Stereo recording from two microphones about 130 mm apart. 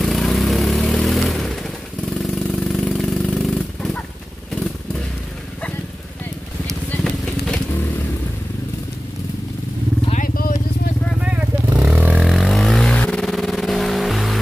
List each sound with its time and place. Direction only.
0.0 s vehicle: centre (ahead or behind)
7.0 s vehicle: 5° left (ahead or behind)
10.1 s vehicle: 90° left
11.9 s vehicle: 5° right (ahead or behind)